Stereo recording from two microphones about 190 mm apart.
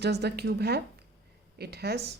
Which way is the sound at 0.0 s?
60° right (ahead or behind).